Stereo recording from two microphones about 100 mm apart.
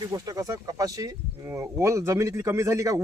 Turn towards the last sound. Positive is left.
turn(degrees=-30)  # may be behind; listen again after turning